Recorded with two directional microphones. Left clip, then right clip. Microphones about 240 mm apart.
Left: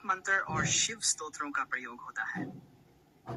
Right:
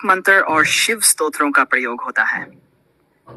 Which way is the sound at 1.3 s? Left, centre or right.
Right.